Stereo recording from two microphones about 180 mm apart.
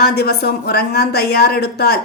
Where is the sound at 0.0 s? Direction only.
60° left (ahead or behind).